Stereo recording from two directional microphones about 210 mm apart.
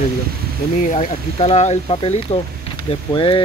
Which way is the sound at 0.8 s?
35° left (ahead or behind).